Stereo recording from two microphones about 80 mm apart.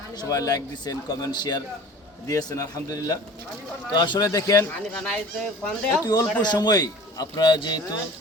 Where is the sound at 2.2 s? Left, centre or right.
Left.